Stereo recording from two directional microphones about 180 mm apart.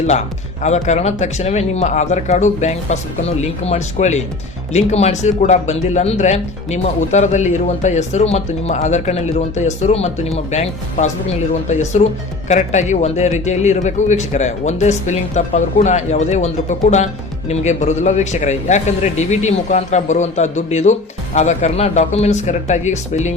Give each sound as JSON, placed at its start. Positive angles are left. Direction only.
{"t": 0.6, "sound": "speech", "side_deg": 40}